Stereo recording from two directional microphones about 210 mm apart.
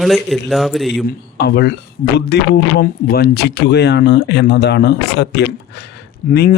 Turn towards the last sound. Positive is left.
turn(degrees=45)  # may be behind; listen again after turning